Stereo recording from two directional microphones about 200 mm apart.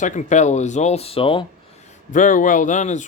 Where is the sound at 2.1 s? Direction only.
40° left (ahead or behind).